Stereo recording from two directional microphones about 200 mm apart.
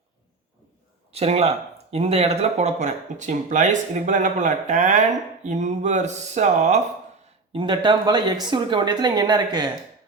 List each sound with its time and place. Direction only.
1.1 s speech: 30° right (ahead or behind)
7.5 s speech: 25° right (ahead or behind)